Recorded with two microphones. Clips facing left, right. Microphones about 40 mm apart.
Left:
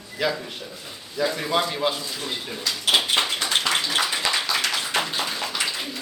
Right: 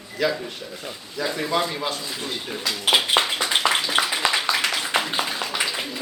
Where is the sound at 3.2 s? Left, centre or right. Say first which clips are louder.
Right 2 dB; centre.